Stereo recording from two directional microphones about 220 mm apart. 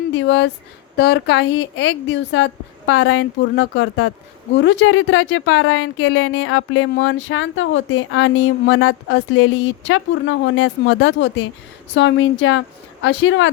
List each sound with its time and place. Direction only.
0.1 s speech: 60° left (ahead or behind)
0.9 s speech: 45° left (ahead or behind)